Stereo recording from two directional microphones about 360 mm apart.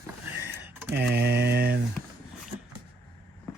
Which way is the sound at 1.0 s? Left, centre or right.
Right.